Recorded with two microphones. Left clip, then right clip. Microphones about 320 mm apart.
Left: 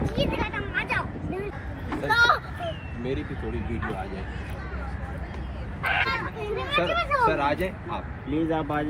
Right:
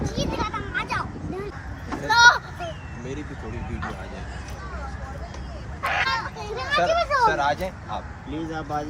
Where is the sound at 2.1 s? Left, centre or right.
Centre.